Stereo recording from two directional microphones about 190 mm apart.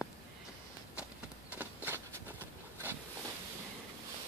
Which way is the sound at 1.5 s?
10° right (ahead or behind).